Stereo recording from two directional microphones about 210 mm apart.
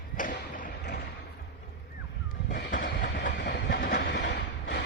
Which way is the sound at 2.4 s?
40° left (ahead or behind).